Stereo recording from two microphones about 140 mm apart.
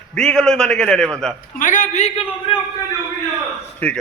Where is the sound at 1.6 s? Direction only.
65° left (ahead or behind).